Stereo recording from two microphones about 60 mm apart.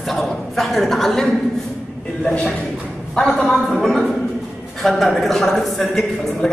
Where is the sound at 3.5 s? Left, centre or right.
Centre.